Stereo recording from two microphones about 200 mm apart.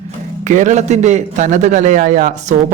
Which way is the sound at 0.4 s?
40° right (ahead or behind).